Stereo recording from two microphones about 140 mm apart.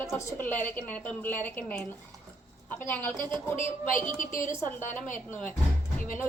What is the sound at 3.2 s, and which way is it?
Speech, 35° right (ahead or behind).